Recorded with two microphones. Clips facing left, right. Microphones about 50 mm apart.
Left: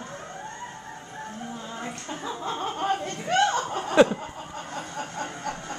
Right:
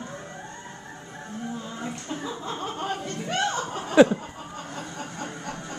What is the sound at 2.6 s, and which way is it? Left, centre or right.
Chuckle, centre.